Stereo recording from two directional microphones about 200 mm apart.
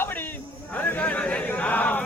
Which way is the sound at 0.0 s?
10° left (ahead or behind).